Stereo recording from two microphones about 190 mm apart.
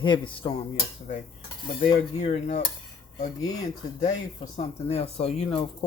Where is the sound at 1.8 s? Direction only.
35° left (ahead or behind).